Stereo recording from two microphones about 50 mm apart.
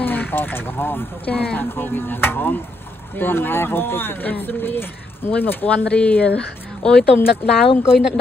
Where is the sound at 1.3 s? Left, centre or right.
Left.